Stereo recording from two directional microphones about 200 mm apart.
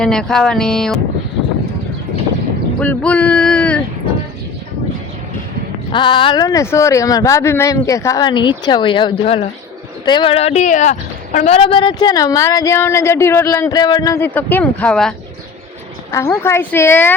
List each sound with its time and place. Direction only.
0.0 s music: 5° left (ahead or behind)
2.8 s speech: 5° left (ahead or behind)
5.9 s speech: 25° left (ahead or behind); by 15.1 s 5° left (ahead or behind)
16.1 s speech: 10° left (ahead or behind)